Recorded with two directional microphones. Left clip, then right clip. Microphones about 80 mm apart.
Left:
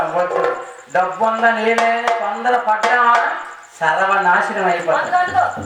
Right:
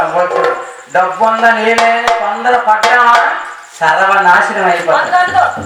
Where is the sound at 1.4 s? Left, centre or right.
Left.